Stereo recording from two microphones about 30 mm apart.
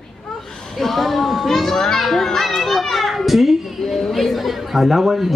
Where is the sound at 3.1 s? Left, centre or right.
Centre.